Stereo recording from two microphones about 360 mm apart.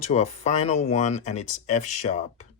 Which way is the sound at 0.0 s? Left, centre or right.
Centre.